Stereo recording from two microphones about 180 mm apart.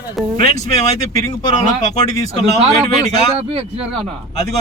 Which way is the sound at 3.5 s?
35° right (ahead or behind).